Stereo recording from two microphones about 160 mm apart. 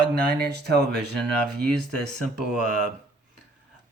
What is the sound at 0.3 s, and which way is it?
Speech, 90° right.